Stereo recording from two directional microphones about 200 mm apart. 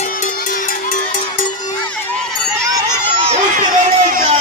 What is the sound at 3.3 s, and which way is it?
Crowd, 40° right (ahead or behind).